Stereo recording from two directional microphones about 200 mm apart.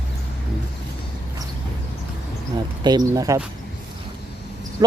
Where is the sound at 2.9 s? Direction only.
20° right (ahead or behind).